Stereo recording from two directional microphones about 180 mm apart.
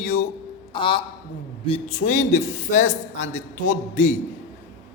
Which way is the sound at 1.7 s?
45° left (ahead or behind).